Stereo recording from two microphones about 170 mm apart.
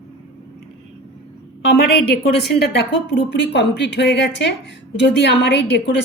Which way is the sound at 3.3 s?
90° left.